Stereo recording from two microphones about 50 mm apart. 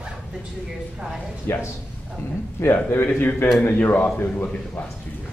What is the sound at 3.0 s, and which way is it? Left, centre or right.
A man's voice, left.